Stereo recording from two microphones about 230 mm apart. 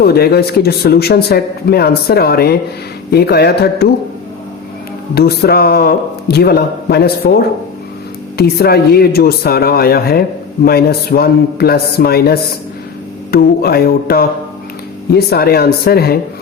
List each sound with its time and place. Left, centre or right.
0.0 s speech: left
5.1 s speech: left